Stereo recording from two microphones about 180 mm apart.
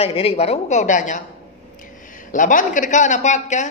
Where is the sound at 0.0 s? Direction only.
35° left (ahead or behind).